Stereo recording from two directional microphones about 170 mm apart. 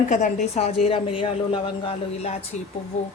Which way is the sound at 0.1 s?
45° left (ahead or behind).